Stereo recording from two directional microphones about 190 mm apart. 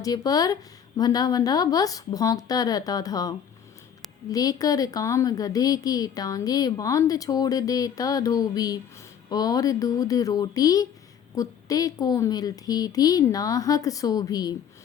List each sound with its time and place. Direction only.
0.0 s a woman's voice: 20° left (ahead or behind)